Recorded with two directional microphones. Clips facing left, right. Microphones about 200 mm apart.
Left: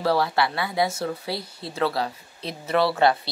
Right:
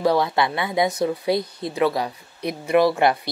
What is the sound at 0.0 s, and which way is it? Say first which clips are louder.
Speech: right 3 dB; 20° right (ahead or behind).